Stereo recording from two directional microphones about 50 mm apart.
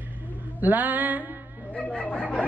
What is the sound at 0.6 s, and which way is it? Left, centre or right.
Speech, right.